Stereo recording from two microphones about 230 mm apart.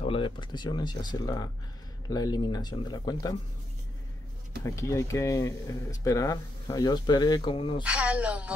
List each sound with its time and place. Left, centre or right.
0.0 s speech: left
4.6 s speech: centre
7.8 s a woman's voice: centre